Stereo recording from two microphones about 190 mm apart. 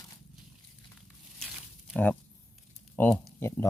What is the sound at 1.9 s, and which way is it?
Speech, 5° left (ahead or behind).